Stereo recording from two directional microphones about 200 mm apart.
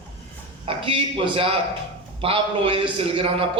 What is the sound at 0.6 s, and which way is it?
A man's voice, 25° right (ahead or behind).